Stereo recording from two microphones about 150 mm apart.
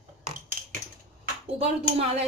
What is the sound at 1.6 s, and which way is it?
Speech, 40° right (ahead or behind).